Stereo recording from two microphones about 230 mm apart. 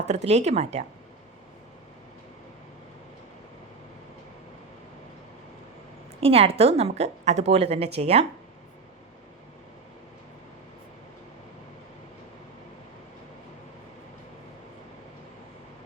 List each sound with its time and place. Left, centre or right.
0.1 s a woman's voice: right
6.1 s a woman's voice: right